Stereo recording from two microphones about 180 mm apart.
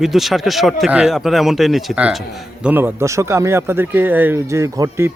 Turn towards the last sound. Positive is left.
turn(degrees=-15)  # may be behind; listen again after turning